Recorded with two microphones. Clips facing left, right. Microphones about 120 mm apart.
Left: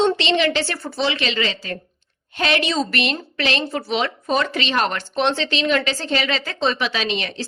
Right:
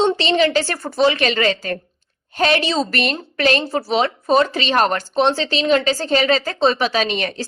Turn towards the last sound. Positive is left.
turn(degrees=-45)  # may be behind; listen again after turning